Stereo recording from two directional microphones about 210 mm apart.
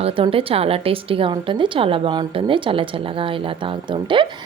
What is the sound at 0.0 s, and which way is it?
A woman's voice, 25° right (ahead or behind).